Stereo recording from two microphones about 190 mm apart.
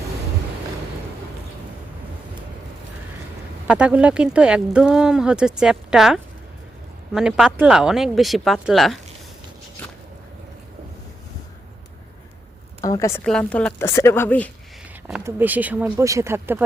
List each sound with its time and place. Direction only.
3.7 s speech: 5° right (ahead or behind)
12.8 s a woman's voice: 15° left (ahead or behind)
13.2 s speech: 5° left (ahead or behind)
15.0 s speech: 10° right (ahead or behind)